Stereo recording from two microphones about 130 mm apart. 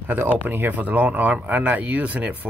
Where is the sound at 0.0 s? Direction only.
15° right (ahead or behind).